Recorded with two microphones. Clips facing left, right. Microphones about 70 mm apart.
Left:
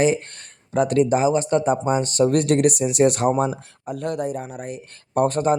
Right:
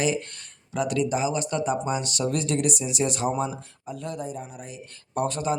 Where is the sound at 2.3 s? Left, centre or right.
Left.